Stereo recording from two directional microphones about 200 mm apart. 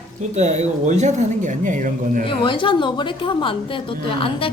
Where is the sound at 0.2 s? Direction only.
35° right (ahead or behind).